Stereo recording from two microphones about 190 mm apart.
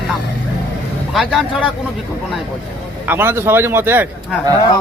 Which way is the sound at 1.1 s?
Centre (ahead or behind).